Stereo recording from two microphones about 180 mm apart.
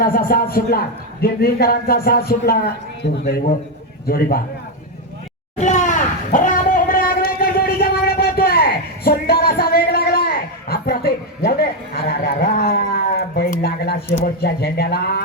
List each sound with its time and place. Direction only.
0.0 s a man's voice: 55° left (ahead or behind)
5.5 s a sound: 40° left (ahead or behind); by 14.0 s 60° left (ahead or behind)
14.4 s a man's voice: 60° left (ahead or behind)